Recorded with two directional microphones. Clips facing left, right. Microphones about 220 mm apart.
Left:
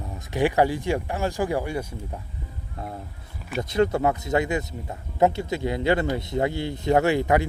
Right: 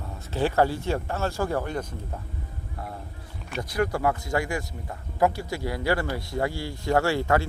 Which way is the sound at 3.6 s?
25° left (ahead or behind).